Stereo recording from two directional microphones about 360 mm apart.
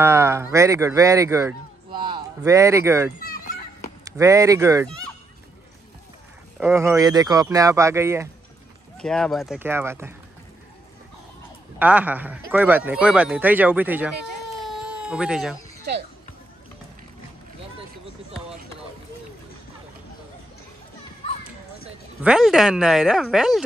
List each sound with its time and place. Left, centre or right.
0.0 s speech: centre
3.2 s fowl: left
4.0 s speech: centre
6.6 s a man's voice: centre
11.8 s a man's voice: centre
14.6 s baby cry: centre
22.2 s a man's voice: centre